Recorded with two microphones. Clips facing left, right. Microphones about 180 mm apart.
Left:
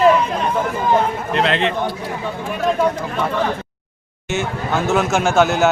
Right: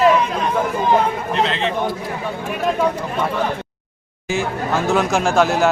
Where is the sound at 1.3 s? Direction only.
65° left (ahead or behind).